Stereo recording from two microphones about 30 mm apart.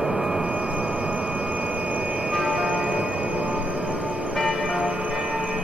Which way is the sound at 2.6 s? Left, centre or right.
Right.